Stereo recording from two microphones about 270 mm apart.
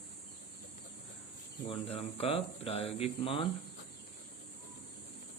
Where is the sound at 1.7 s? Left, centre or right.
Left.